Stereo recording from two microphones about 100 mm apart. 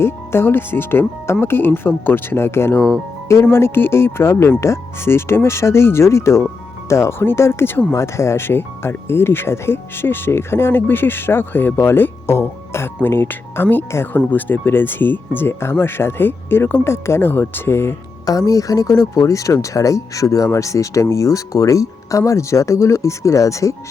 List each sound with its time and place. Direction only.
0.0 s speech: 25° left (ahead or behind)
18.3 s speech: 35° left (ahead or behind)